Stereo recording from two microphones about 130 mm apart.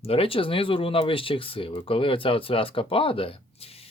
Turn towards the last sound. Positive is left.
turn(degrees=45)  # may be behind; listen again after turning